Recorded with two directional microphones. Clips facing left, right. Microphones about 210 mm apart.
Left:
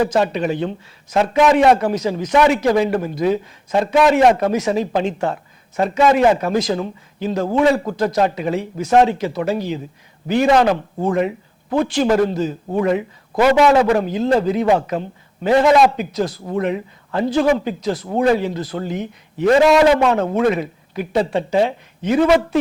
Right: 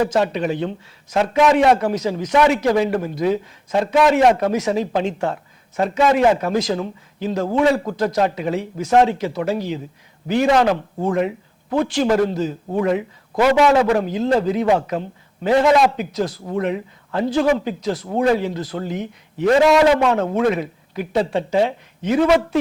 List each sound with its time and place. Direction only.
0.0 s a man's voice: 10° left (ahead or behind)
16.2 s speech: 25° left (ahead or behind)
16.6 s a man's voice: 15° left (ahead or behind)